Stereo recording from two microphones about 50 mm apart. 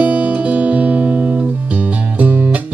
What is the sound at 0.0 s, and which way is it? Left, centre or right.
Music, right.